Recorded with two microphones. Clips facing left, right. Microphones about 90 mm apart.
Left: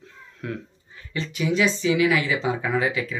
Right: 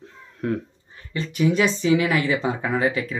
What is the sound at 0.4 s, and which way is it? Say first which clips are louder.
Speech: right 7 dB; 40° right (ahead or behind).